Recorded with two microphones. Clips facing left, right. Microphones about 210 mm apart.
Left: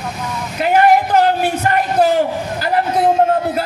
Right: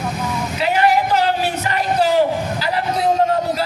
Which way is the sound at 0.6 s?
50° left (ahead or behind).